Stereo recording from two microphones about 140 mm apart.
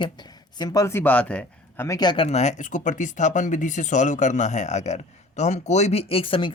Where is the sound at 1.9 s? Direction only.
30° left (ahead or behind).